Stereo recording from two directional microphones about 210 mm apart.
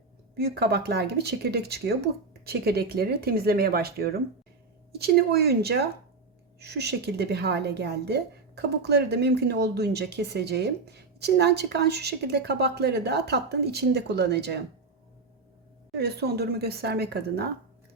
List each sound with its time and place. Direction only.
0.3 s a woman's voice: 50° right (ahead or behind)
16.0 s a woman's voice: 50° right (ahead or behind)